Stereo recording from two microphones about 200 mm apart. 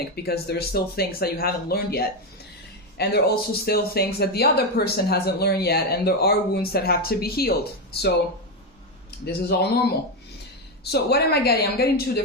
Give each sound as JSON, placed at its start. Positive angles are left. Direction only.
{"t": 0.2, "sound": "speech", "side_deg": 50}
{"t": 9.2, "sound": "speech", "side_deg": 55}
{"t": 10.8, "sound": "speech", "side_deg": 55}